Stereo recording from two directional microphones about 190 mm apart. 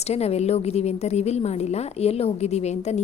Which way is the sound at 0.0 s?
35° left (ahead or behind).